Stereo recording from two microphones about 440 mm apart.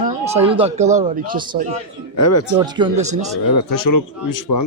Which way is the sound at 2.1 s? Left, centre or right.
Left.